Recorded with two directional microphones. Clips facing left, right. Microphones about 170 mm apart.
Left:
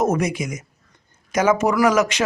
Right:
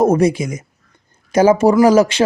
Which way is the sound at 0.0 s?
30° right (ahead or behind).